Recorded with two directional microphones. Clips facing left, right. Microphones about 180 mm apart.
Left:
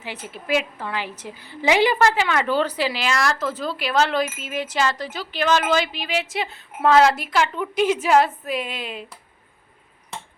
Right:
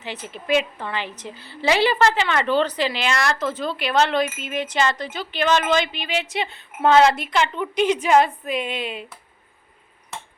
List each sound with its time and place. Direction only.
0.0 s a woman's voice: 10° left (ahead or behind)